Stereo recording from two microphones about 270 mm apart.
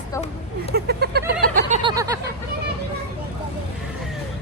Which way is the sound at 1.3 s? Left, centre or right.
Right.